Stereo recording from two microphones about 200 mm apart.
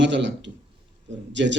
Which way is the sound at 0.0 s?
65° right (ahead or behind).